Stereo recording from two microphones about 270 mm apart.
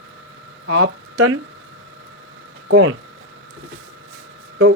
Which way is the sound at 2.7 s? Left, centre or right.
Right.